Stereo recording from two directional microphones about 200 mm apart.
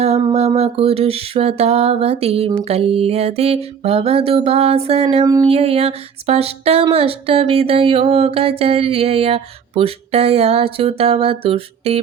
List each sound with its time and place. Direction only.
0.3 s music: 30° right (ahead or behind)
5.2 s music: 20° right (ahead or behind)